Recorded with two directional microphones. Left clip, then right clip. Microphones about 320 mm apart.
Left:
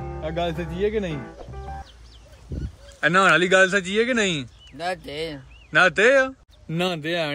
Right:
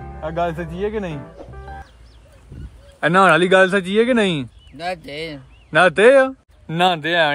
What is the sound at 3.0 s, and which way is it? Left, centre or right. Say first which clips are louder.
Speech: right 4 dB; centre.